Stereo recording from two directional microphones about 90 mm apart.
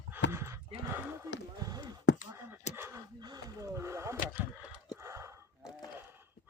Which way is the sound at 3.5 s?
30° right (ahead or behind).